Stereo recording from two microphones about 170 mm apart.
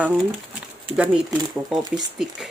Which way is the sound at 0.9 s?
5° right (ahead or behind).